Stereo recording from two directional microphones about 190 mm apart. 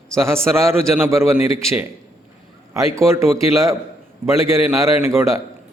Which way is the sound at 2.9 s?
15° right (ahead or behind).